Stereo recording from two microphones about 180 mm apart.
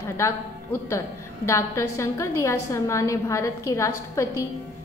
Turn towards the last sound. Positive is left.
turn(degrees=15)  # may be behind; listen again after turning